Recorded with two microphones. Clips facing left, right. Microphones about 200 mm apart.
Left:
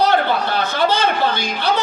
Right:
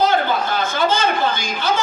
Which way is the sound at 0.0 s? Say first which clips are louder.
Left 1 dB; 65° left (ahead or behind).